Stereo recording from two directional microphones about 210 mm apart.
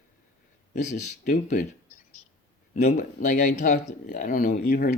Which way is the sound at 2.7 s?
35° left (ahead or behind).